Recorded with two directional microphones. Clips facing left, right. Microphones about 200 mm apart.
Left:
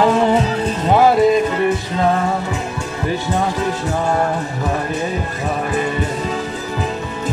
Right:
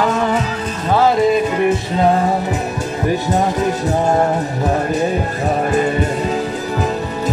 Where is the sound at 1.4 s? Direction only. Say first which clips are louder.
Right 1 dB; 15° right (ahead or behind).